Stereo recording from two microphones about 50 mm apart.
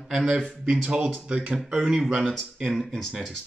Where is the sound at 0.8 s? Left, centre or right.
Right.